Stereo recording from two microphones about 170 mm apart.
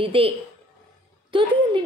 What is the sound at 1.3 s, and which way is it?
Speech, 30° right (ahead or behind).